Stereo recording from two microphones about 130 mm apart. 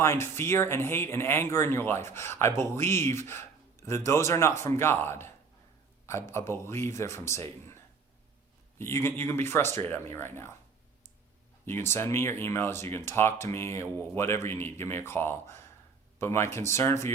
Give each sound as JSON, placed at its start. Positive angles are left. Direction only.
{"t": 0.0, "sound": "speech", "side_deg": 20}
{"t": 8.8, "sound": "speech", "side_deg": 20}
{"t": 11.6, "sound": "speech", "side_deg": 20}